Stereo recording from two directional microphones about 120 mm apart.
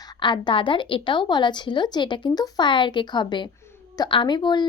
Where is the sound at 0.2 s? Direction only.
40° left (ahead or behind).